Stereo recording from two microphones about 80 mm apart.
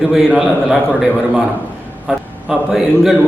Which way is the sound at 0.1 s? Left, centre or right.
Centre.